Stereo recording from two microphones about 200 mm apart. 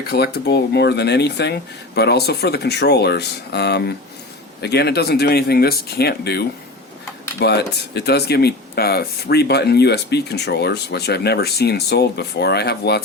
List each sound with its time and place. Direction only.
0.1 s speech: 55° left (ahead or behind)